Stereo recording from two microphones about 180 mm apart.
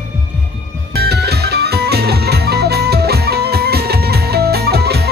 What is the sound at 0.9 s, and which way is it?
Music, 65° right (ahead or behind).